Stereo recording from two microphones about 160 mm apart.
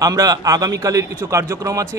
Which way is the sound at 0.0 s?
20° right (ahead or behind).